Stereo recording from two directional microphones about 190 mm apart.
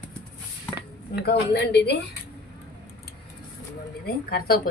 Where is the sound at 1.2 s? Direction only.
60° left (ahead or behind).